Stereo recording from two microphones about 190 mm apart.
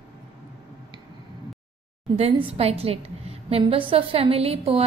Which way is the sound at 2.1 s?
30° right (ahead or behind).